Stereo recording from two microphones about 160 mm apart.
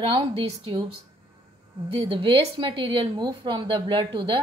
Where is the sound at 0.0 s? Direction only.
30° right (ahead or behind).